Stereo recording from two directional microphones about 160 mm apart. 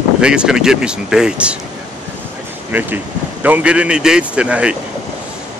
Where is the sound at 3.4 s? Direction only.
10° right (ahead or behind).